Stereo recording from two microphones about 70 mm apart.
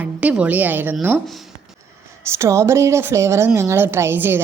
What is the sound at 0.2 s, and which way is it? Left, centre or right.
Speech, centre.